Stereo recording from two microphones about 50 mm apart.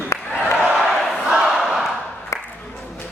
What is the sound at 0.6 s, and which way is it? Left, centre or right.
Battle cry, centre.